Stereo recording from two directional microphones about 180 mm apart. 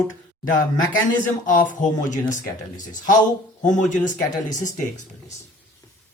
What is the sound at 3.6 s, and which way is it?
Speech, 45° left (ahead or behind).